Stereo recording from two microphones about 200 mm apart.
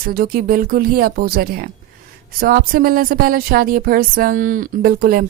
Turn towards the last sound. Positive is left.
turn(degrees=-45)  # may be behind; listen again after turning